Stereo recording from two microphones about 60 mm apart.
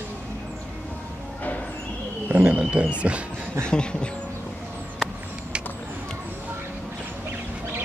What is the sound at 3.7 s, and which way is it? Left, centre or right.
Speech, centre.